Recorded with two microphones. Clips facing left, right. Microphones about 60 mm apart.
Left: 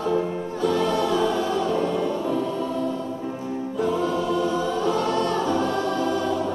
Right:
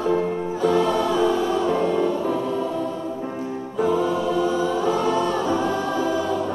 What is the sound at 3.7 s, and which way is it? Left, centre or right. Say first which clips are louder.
Choir: right 3 dB; centre.